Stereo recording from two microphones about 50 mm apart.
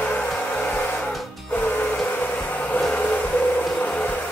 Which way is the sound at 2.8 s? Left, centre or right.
Left.